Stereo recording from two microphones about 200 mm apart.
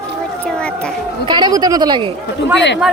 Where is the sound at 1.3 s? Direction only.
20° right (ahead or behind).